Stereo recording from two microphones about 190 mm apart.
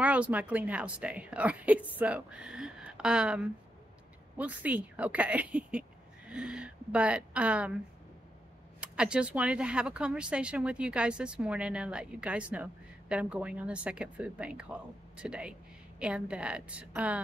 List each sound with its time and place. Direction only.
0.0 s a woman's voice: 5° right (ahead or behind)
8.8 s speech: 5° right (ahead or behind)